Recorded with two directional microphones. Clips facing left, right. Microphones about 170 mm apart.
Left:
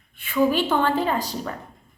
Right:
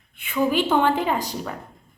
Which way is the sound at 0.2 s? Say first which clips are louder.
Left 1 dB; 15° right (ahead or behind).